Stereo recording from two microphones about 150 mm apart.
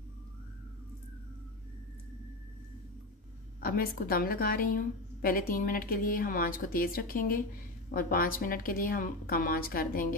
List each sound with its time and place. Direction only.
3.6 s a woman's voice: 75° left (ahead or behind)